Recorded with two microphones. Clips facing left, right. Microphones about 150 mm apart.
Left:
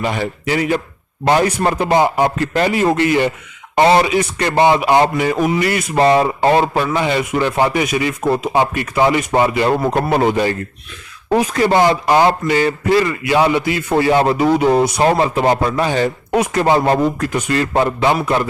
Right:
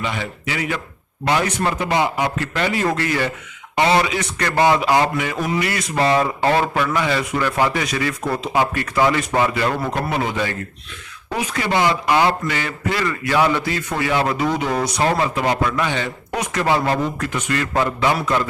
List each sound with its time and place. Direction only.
0.0 s speech: 40° left (ahead or behind)
2.7 s speech: 20° left (ahead or behind)
3.8 s speech: 35° left (ahead or behind)
5.7 s speech: 30° left (ahead or behind)
9.9 s speech: 45° left (ahead or behind)
13.5 s a man's voice: 15° left (ahead or behind)
13.9 s speech: 35° left (ahead or behind)